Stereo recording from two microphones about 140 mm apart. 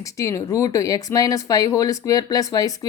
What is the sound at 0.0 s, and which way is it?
A woman's voice, 20° left (ahead or behind).